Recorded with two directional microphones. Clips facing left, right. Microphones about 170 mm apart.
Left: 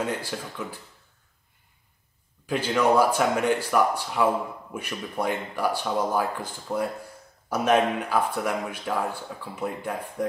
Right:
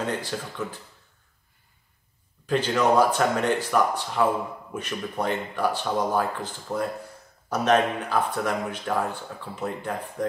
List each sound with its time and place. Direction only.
0.2 s speech: 10° left (ahead or behind)
2.4 s speech: 10° left (ahead or behind)